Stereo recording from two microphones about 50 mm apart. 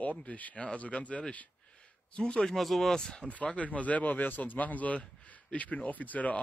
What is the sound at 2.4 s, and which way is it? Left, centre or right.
Speech, centre.